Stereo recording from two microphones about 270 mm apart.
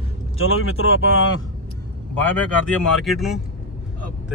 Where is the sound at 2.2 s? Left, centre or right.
Centre.